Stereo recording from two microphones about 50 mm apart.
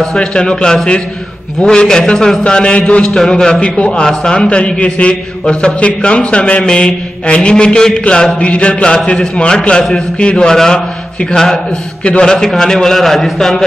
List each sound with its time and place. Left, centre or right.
0.0 s a man's voice: centre
3.6 s a man's voice: left
12.0 s a man's voice: left
12.3 s a man's voice: centre